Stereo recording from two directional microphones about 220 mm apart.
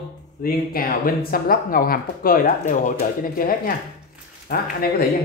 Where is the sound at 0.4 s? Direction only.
40° left (ahead or behind).